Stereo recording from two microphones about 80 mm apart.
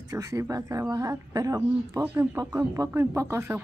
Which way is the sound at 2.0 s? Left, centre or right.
Right.